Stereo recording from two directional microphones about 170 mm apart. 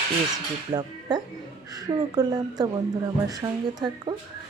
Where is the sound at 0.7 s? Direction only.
25° right (ahead or behind).